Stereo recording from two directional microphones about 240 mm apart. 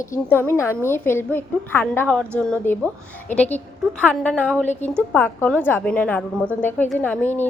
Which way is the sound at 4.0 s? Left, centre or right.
Centre.